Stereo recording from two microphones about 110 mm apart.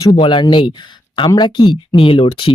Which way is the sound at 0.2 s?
45° left (ahead or behind).